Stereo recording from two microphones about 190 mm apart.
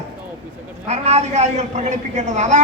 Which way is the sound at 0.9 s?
35° right (ahead or behind).